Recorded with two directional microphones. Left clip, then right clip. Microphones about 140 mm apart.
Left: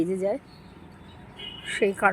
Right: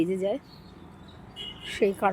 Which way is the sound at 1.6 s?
15° right (ahead or behind).